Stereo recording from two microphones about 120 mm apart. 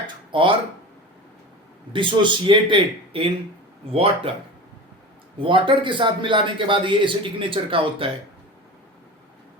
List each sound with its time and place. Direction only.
0.3 s speech: 45° right (ahead or behind)
1.9 s a man's voice: 45° right (ahead or behind)
5.4 s a man's voice: 45° right (ahead or behind)